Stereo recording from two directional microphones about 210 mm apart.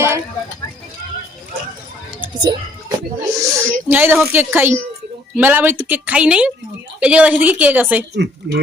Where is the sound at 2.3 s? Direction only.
20° right (ahead or behind).